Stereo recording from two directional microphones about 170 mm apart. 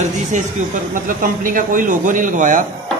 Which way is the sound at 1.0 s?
55° right (ahead or behind).